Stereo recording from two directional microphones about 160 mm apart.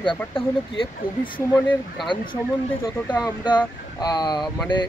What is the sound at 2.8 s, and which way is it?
Speech, 20° left (ahead or behind).